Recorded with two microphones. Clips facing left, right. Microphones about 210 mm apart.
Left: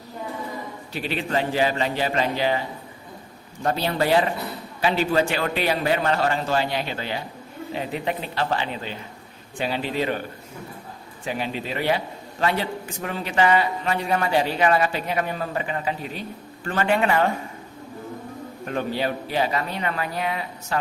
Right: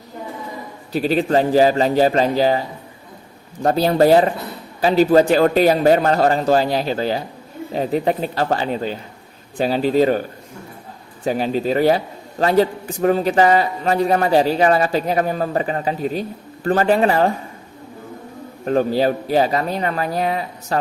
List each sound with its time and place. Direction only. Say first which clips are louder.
0.9 s a man's voice: right 9 dB; 40° right (ahead or behind)
18.6 s a man's voice: right 9 dB; 35° right (ahead or behind)